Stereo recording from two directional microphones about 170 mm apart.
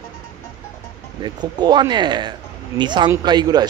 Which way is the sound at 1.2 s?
25° right (ahead or behind).